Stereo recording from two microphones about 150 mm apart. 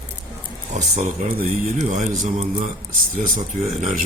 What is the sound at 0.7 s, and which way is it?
Speech, 50° right (ahead or behind).